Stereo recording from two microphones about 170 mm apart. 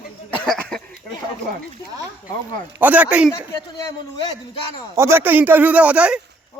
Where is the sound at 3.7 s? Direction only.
25° left (ahead or behind).